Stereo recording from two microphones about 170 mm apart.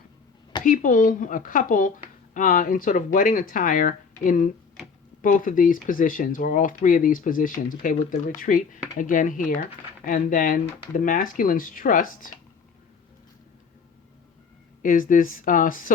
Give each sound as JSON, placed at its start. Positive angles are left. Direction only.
{"t": 0.6, "sound": "speech", "side_deg": 55}
{"t": 14.8, "sound": "speech", "side_deg": 50}